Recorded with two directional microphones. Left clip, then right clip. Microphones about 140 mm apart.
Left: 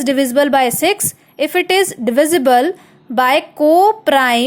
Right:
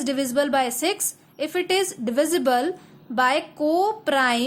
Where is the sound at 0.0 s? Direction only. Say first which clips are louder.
Left 9 dB; 35° left (ahead or behind).